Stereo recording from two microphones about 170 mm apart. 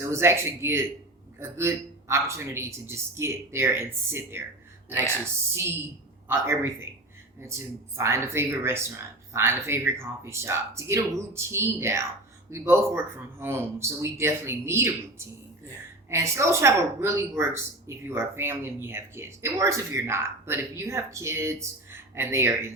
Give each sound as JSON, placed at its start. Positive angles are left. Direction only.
{"t": 0.0, "sound": "a woman's voice", "side_deg": -15}
{"t": 6.2, "sound": "a man's voice", "side_deg": -15}
{"t": 16.0, "sound": "a woman's voice", "side_deg": -15}